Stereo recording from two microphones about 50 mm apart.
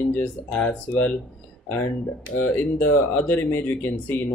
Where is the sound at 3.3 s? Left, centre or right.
Left.